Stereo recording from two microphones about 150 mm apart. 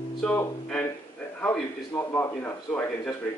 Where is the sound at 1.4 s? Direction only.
15° left (ahead or behind).